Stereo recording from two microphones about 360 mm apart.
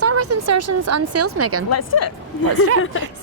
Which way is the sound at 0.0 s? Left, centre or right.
Right.